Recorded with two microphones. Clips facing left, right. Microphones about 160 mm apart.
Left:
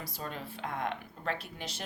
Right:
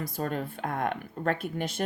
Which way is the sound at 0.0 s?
50° right (ahead or behind).